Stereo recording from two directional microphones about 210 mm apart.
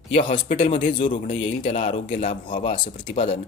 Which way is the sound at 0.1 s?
25° left (ahead or behind).